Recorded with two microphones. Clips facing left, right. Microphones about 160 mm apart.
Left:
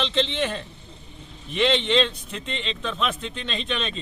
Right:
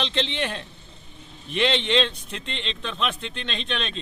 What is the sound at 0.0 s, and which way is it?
A man's voice, centre (ahead or behind).